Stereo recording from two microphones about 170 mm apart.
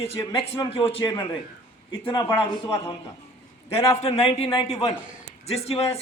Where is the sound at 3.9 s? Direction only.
35° left (ahead or behind).